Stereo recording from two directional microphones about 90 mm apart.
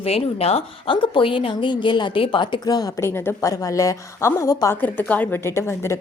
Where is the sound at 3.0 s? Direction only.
25° left (ahead or behind).